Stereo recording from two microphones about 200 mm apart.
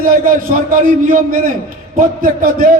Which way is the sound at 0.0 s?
45° right (ahead or behind).